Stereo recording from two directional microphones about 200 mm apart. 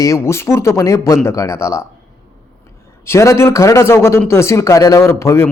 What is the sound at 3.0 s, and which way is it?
A man's voice, 15° left (ahead or behind).